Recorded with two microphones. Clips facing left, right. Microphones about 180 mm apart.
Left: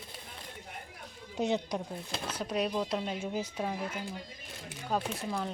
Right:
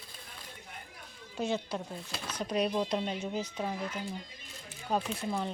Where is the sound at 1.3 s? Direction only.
20° left (ahead or behind).